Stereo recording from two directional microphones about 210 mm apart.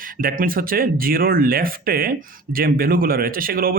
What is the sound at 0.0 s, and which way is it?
Speech, 40° right (ahead or behind).